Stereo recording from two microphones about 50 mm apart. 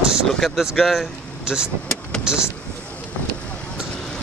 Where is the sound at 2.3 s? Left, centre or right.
Centre.